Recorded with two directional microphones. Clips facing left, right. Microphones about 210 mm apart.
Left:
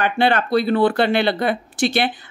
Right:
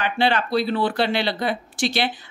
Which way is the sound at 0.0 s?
50° left (ahead or behind).